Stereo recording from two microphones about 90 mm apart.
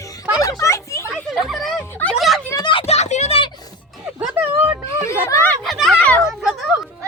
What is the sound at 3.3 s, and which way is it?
Music, 90° left.